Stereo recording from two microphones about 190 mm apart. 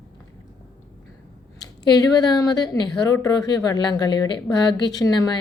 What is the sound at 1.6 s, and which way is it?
Speech, 20° left (ahead or behind).